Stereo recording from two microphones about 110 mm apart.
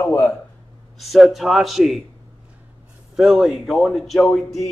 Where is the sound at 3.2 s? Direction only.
5° right (ahead or behind).